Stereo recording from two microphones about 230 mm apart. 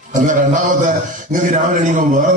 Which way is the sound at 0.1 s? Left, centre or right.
Right.